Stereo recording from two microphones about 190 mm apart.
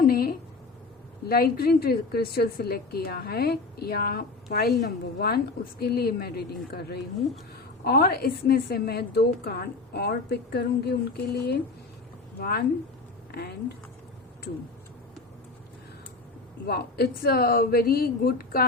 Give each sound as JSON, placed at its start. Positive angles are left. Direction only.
{"t": 0.0, "sound": "a woman's voice", "side_deg": 50}
{"t": 16.6, "sound": "speech", "side_deg": 55}